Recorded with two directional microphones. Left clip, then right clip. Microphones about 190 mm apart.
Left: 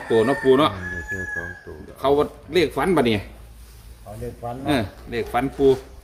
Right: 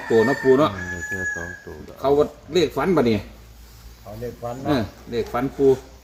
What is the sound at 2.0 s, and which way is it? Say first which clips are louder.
Speech: right 1 dB; 25° right (ahead or behind).